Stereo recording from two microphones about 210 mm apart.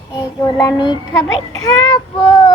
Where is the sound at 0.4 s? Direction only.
20° left (ahead or behind).